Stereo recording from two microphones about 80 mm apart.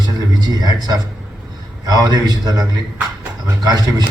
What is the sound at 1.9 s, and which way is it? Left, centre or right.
A man's voice, right.